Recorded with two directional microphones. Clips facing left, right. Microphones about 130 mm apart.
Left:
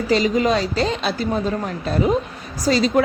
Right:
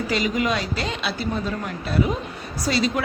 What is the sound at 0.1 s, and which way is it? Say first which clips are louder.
Speech: left 7 dB; 35° left (ahead or behind).